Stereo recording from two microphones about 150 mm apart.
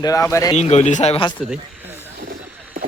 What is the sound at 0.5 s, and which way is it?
Speech, 45° left (ahead or behind).